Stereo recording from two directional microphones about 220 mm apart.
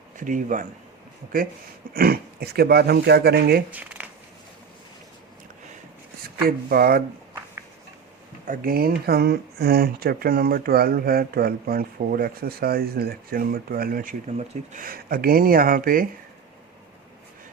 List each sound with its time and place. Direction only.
0.2 s a man's voice: 35° right (ahead or behind)
1.9 s speech: 40° right (ahead or behind)
3.7 s speech: 5° right (ahead or behind)
6.4 s speech: 45° right (ahead or behind)
8.4 s speech: 40° right (ahead or behind)